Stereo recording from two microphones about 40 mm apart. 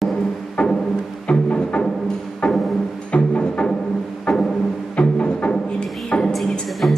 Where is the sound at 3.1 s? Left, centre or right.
Left.